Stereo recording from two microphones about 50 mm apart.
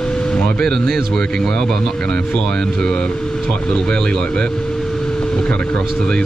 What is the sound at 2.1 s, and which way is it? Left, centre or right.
Speech, left.